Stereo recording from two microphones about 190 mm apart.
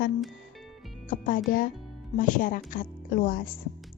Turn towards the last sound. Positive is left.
turn(degrees=45)  # may be behind; listen again after turning